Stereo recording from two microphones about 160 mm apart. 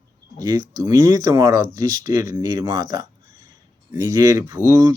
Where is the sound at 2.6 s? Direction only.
20° right (ahead or behind).